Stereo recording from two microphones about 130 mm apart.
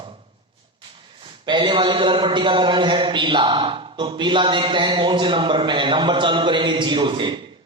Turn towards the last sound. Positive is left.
turn(degrees=-35)  # may be behind; listen again after turning